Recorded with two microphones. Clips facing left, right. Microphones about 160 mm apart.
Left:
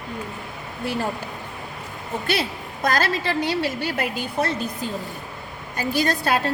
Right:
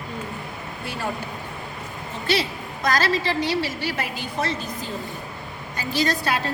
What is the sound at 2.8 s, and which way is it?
A woman's voice, 55° left (ahead or behind).